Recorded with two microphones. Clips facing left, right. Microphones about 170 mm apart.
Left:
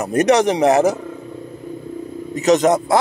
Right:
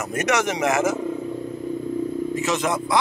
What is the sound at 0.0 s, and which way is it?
Speech, 35° left (ahead or behind).